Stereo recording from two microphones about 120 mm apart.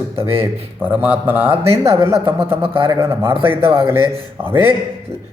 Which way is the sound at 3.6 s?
45° right (ahead or behind).